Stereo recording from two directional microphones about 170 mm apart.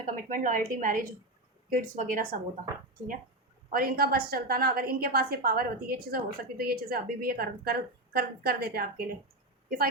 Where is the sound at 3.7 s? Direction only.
60° right (ahead or behind).